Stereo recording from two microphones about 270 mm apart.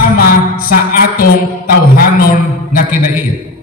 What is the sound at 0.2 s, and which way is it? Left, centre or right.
Music, left.